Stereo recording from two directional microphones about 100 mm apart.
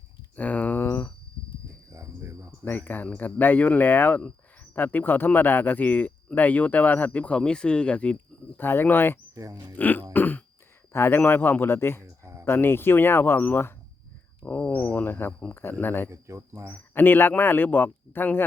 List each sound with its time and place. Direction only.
0.3 s a sound: 15° left (ahead or behind)
1.9 s cricket: 30° right (ahead or behind)
2.6 s speech: 15° left (ahead or behind)
9.3 s speech: 35° right (ahead or behind)
9.7 s throat clearing: 15° left (ahead or behind)
10.9 s a man's voice: 25° left (ahead or behind)
12.2 s a sound: 30° right (ahead or behind)
12.5 s a man's voice: 20° left (ahead or behind)
14.4 s a sound: 15° left (ahead or behind)
14.9 s a man's voice: 20° left (ahead or behind)
16.0 s speech: 30° right (ahead or behind)
16.9 s a man's voice: 20° left (ahead or behind)